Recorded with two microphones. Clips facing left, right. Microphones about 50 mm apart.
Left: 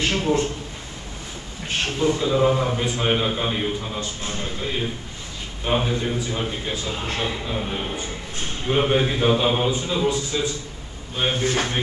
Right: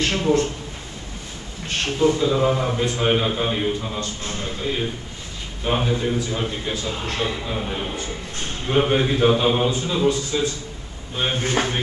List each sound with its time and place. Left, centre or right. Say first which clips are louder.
0.0 s a man's voice: right 2 dB; centre
1.7 s a man's voice: right 2 dB; centre
11.3 s speech: right 1 dB; right